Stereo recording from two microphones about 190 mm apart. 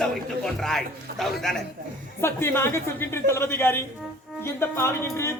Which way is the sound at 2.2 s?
15° left (ahead or behind).